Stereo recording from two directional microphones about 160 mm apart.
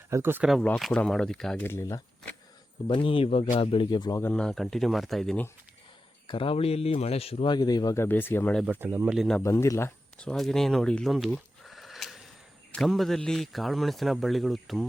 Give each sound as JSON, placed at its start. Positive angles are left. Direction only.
{"t": 0.1, "sound": "speech", "side_deg": -15}
{"t": 0.4, "sound": "a man's voice", "side_deg": 0}
{"t": 1.6, "sound": "speech", "side_deg": 15}
{"t": 2.8, "sound": "speech", "side_deg": 35}
{"t": 4.2, "sound": "a man's voice", "side_deg": 5}
{"t": 6.2, "sound": "speech", "side_deg": 35}
{"t": 8.0, "sound": "speech", "side_deg": 15}
{"t": 8.6, "sound": "speech", "side_deg": -10}
{"t": 9.4, "sound": "speech", "side_deg": 20}
{"t": 10.2, "sound": "a man's voice", "side_deg": 5}